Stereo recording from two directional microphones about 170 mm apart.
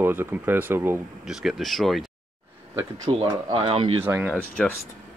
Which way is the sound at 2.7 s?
25° right (ahead or behind).